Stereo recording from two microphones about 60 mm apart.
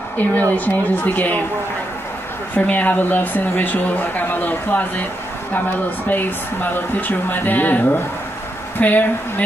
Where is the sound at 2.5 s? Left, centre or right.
Left.